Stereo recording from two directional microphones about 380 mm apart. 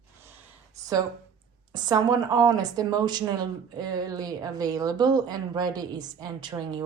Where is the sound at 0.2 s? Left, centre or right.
Centre.